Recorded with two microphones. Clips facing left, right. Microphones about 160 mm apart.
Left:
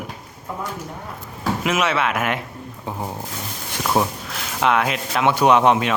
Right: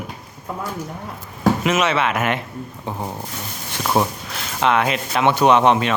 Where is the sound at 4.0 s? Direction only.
Centre (ahead or behind).